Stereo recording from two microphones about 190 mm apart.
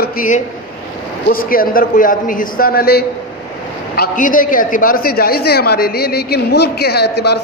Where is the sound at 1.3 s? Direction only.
50° left (ahead or behind).